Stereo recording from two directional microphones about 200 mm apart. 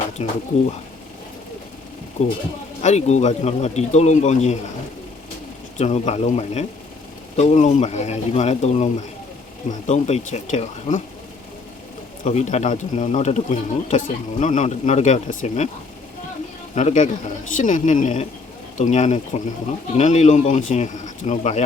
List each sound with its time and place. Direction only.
0.2 s speech: 35° left (ahead or behind)
2.2 s speech: 35° left (ahead or behind)
5.7 s speech: 35° left (ahead or behind)
12.2 s speech: 35° left (ahead or behind)
16.7 s speech: 35° left (ahead or behind)